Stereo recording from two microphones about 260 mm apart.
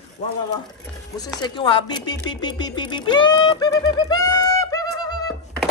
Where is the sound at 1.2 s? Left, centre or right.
Centre.